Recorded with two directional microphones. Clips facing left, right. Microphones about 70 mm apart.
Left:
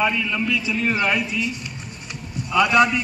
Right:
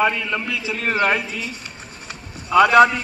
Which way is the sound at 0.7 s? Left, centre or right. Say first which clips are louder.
Right 4 dB; right.